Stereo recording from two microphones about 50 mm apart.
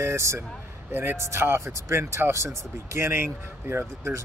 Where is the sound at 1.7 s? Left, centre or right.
Right.